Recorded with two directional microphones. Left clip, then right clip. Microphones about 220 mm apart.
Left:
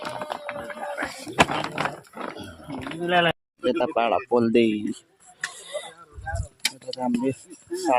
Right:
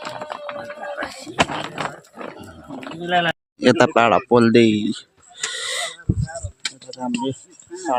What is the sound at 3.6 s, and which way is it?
Speech, 30° right (ahead or behind).